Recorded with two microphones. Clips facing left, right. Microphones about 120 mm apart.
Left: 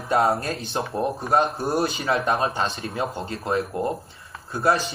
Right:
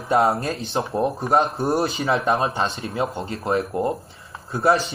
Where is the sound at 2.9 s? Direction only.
Centre (ahead or behind).